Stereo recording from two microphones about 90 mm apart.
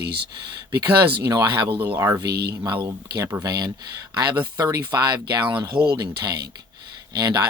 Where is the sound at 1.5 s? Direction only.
60° right (ahead or behind).